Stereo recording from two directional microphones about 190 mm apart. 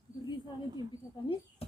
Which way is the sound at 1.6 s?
30° left (ahead or behind).